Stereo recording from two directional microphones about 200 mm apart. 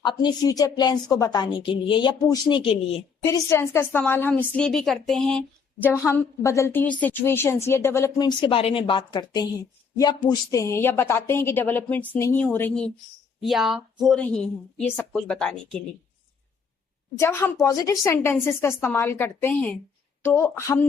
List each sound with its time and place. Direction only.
0.0 s speech: 20° left (ahead or behind)
3.2 s a woman's voice: 15° left (ahead or behind)
13.4 s speech: centre (ahead or behind)
17.2 s a woman's voice: 15° left (ahead or behind)